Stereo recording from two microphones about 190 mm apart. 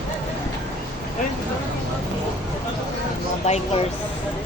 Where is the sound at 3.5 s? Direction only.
35° left (ahead or behind).